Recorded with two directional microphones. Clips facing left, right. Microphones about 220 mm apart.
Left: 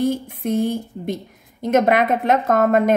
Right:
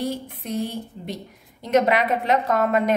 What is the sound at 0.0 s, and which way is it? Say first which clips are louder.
A woman's voice: left 7 dB; 50° left (ahead or behind).